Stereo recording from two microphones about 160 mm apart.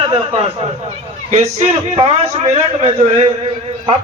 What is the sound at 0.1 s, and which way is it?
A man's voice, 35° right (ahead or behind).